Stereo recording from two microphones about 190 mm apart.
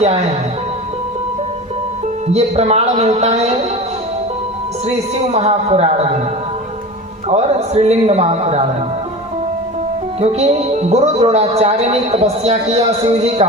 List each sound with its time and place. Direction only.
2.2 s speech: 35° right (ahead or behind)
4.9 s speech: 35° right (ahead or behind)
7.3 s speech: 35° right (ahead or behind)
10.2 s speech: 35° right (ahead or behind)